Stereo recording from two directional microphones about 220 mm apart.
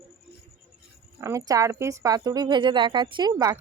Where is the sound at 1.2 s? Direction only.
15° right (ahead or behind).